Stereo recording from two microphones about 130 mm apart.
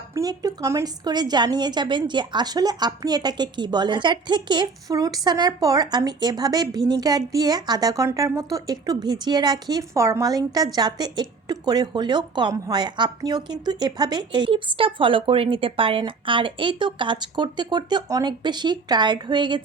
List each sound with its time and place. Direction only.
0.1 s a woman's voice: 30° right (ahead or behind)